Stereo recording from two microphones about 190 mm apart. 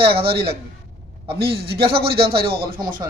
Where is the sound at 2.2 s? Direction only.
30° right (ahead or behind).